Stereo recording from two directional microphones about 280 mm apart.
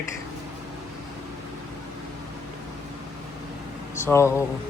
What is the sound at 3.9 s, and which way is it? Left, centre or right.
Speech, centre.